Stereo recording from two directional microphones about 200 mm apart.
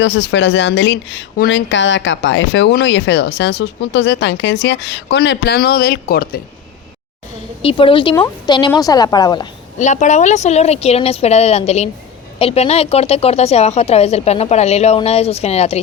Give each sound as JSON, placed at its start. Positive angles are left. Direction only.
{"t": 0.0, "sound": "speech", "side_deg": 60}
{"t": 7.6, "sound": "speech", "side_deg": 25}
{"t": 9.7, "sound": "speech", "side_deg": 35}